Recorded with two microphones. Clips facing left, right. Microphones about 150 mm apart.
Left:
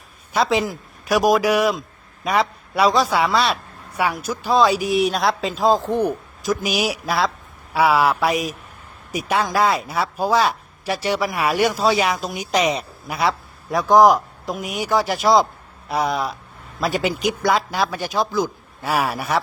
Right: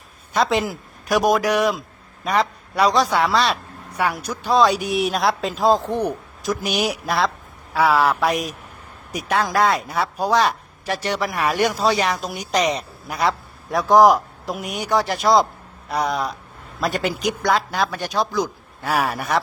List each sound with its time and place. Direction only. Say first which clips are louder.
0.3 s speech: even; centre (ahead or behind)